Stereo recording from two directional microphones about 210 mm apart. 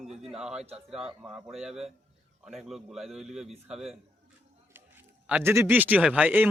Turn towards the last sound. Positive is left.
turn(degrees=-5)  # may be behind; listen again after turning